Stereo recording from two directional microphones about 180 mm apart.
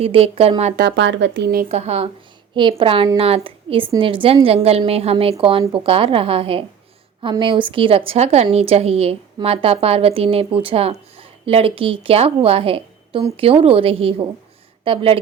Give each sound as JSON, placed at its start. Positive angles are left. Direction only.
{"t": 0.0, "sound": "a woman's voice", "side_deg": -30}
{"t": 0.8, "sound": "speech", "side_deg": -75}
{"t": 1.7, "sound": "a woman's voice", "side_deg": -35}